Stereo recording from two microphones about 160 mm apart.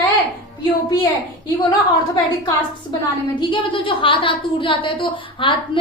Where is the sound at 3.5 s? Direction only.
30° left (ahead or behind).